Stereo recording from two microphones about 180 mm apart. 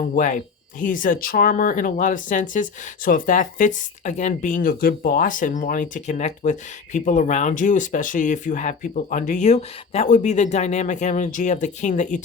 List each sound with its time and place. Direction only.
0.1 s speech: 45° left (ahead or behind)